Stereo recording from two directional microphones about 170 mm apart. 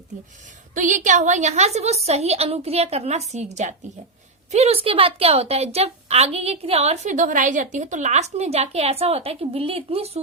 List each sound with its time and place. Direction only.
0.7 s a woman's voice: 50° right (ahead or behind)